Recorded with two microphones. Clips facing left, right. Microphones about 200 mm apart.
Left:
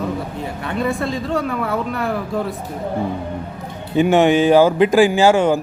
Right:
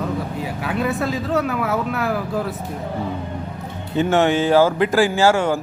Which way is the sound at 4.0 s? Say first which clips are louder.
Left 4 dB; 15° left (ahead or behind).